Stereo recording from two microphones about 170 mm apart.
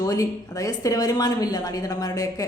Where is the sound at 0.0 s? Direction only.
20° left (ahead or behind).